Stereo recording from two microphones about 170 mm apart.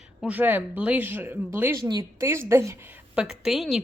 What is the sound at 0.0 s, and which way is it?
A woman's voice, 5° right (ahead or behind).